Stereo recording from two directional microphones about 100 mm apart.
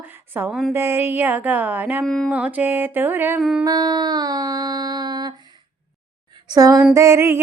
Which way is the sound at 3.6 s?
40° right (ahead or behind).